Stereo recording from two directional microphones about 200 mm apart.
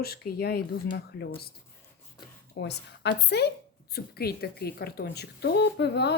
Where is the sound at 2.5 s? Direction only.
60° left (ahead or behind).